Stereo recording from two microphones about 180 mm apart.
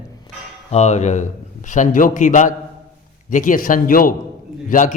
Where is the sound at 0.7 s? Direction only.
40° left (ahead or behind).